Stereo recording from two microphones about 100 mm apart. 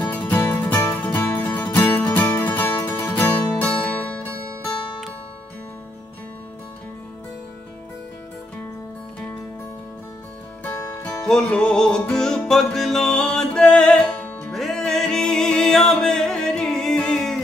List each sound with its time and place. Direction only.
0.0 s music: 15° left (ahead or behind)
11.0 s music: 5° left (ahead or behind)